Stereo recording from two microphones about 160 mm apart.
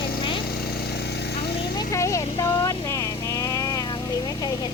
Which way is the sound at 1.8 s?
20° left (ahead or behind).